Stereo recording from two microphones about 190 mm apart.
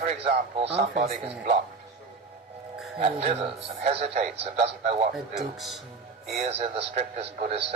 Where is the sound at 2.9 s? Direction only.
35° right (ahead or behind).